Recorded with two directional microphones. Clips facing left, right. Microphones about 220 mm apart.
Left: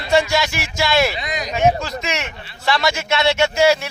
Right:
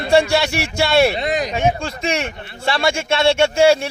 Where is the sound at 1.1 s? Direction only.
55° right (ahead or behind).